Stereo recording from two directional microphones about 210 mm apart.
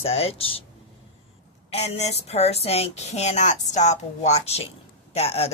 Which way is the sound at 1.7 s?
30° left (ahead or behind).